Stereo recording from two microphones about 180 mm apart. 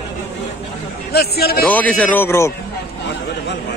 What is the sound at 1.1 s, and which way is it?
Speech, 60° left (ahead or behind).